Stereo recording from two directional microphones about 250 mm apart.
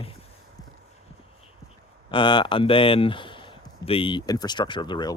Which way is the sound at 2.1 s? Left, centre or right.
Centre.